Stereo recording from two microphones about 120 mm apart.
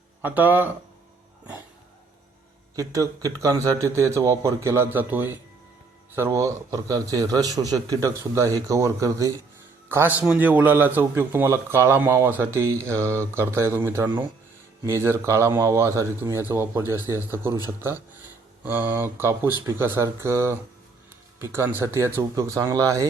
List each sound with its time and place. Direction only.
0.2 s speech: 15° right (ahead or behind)
2.7 s speech: 30° right (ahead or behind)
9.9 s speech: 15° right (ahead or behind)
18.6 s speech: 15° right (ahead or behind)